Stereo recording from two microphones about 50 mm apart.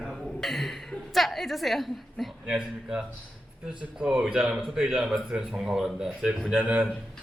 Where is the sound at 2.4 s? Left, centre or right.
Centre.